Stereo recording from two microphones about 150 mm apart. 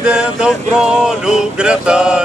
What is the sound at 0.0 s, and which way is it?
Male singing, 5° right (ahead or behind).